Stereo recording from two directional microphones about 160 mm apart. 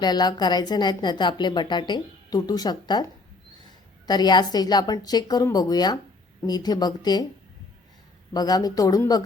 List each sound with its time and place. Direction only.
0.0 s a woman's voice: 25° left (ahead or behind)
8.3 s a woman's voice: 25° left (ahead or behind)